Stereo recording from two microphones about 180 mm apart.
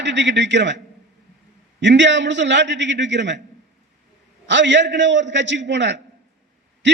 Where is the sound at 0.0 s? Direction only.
80° right.